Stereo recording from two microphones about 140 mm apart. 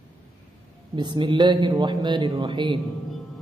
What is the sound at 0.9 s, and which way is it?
Speech, 35° right (ahead or behind).